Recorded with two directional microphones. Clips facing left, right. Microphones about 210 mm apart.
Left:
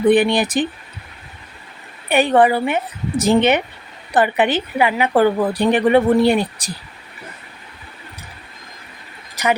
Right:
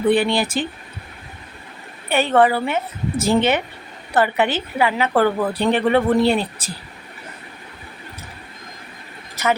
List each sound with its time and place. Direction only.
0.1 s a woman's voice: 15° left (ahead or behind)
2.0 s a woman's voice: 15° left (ahead or behind)
9.3 s vehicle: 15° left (ahead or behind)